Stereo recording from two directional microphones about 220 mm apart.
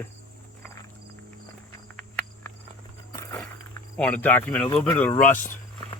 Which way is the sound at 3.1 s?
15° left (ahead or behind).